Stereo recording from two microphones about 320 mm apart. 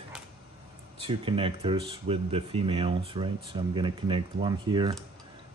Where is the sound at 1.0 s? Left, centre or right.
Centre.